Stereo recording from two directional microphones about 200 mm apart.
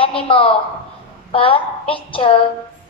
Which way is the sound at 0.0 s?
25° left (ahead or behind).